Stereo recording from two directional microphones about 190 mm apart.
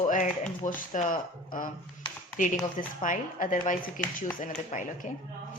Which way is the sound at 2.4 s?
45° left (ahead or behind).